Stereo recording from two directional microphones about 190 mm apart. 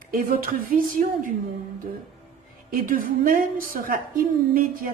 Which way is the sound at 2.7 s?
45° right (ahead or behind).